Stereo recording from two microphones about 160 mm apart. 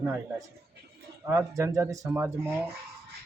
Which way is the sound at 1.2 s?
15° right (ahead or behind).